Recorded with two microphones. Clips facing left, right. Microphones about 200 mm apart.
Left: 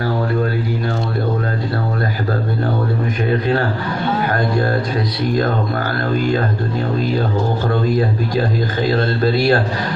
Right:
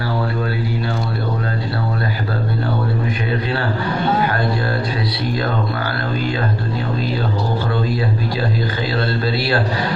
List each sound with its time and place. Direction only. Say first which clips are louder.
4.3 s speech: left 3 dB; 45° left (ahead or behind)
7.7 s speech: left 3 dB; 45° left (ahead or behind)